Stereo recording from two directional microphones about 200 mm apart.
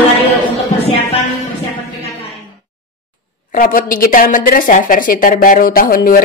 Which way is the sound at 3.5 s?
45° left (ahead or behind).